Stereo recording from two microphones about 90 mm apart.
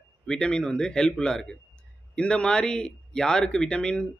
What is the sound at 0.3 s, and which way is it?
A man's voice, 10° left (ahead or behind).